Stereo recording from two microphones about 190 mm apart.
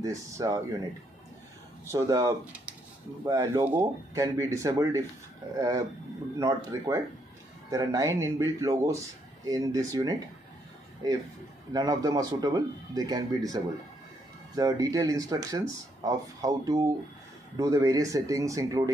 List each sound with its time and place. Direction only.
0.0 s speech: 15° right (ahead or behind)
1.9 s speech: 15° right (ahead or behind)
11.7 s speech: 20° right (ahead or behind)